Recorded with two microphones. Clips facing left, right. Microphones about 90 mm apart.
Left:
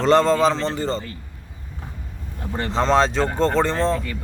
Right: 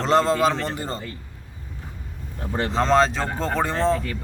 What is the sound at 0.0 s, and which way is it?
Speech, 5° right (ahead or behind).